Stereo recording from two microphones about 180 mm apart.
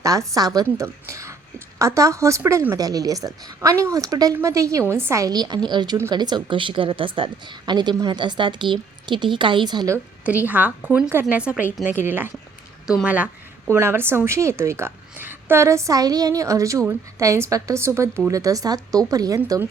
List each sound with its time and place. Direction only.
0.0 s a woman's voice: 20° right (ahead or behind)
10.2 s a woman's voice: 10° right (ahead or behind)